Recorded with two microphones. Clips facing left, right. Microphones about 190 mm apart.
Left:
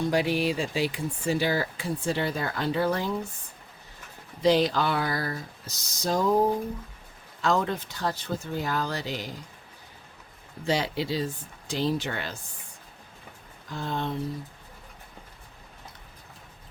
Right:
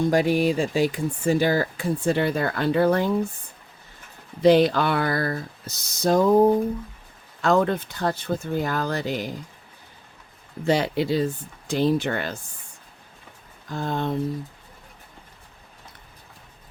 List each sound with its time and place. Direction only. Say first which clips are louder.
0.1 s speech: right 5 dB; 45° right (ahead or behind)
4.4 s speech: right 5 dB; 55° right (ahead or behind)
7.4 s speech: right 5 dB; 55° right (ahead or behind)
10.7 s speech: right 6 dB; 55° right (ahead or behind)
13.7 s speech: right 5 dB; 50° right (ahead or behind)